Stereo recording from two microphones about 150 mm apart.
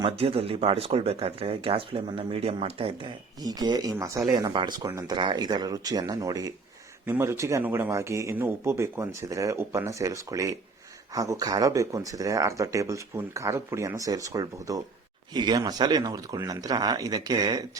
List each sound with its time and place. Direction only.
0.0 s speech: 40° right (ahead or behind)
3.4 s speech: 25° right (ahead or behind)
5.1 s speech: 30° right (ahead or behind)